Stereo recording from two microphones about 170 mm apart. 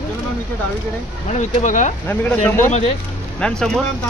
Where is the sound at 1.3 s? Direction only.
45° left (ahead or behind).